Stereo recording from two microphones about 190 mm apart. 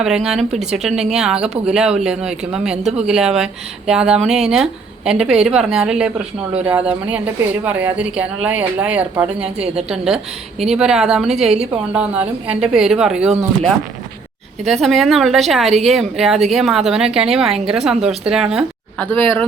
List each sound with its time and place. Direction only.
0.0 s a woman's voice: 5° right (ahead or behind)
11.3 s a woman's voice: 35° right (ahead or behind)
11.9 s speech: 5° right (ahead or behind)
14.6 s a woman's voice: centre (ahead or behind)